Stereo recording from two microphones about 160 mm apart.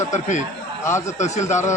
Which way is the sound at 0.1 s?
50° left (ahead or behind).